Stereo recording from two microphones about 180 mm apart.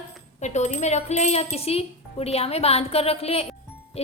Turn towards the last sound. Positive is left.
turn(degrees=35)  # may be behind; listen again after turning